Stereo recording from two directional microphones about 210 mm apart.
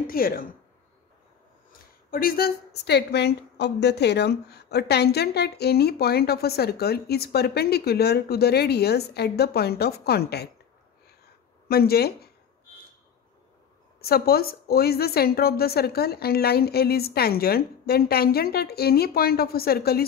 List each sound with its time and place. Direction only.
0.0 s a woman's voice: 45° left (ahead or behind)
1.7 s a woman's voice: 45° left (ahead or behind)
11.7 s a woman's voice: 45° left (ahead or behind)
14.0 s a woman's voice: 45° left (ahead or behind)